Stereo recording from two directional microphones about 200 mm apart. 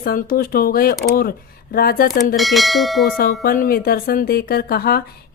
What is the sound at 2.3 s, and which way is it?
Speech, centre (ahead or behind).